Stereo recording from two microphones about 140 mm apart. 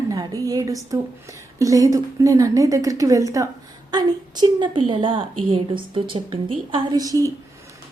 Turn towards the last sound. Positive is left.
turn(degrees=-25)  # may be behind; listen again after turning